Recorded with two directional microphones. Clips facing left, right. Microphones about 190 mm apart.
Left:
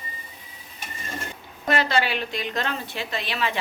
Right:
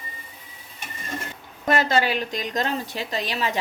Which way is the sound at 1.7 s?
45° right (ahead or behind).